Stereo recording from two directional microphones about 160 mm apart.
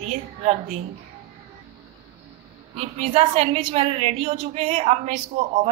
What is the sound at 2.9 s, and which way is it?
A woman's voice, 40° right (ahead or behind).